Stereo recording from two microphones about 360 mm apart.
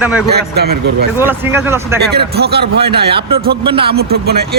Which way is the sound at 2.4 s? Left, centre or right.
Right.